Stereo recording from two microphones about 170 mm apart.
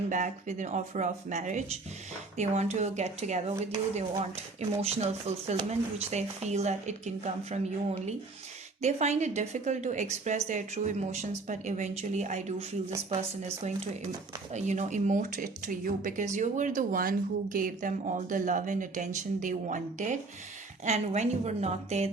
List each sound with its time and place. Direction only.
0.1 s a woman's voice: 45° right (ahead or behind)
4.8 s a woman's voice: 40° right (ahead or behind)
8.8 s a woman's voice: 40° right (ahead or behind)